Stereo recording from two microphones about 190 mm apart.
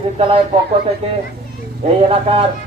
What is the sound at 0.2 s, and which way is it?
A man's voice, 30° right (ahead or behind).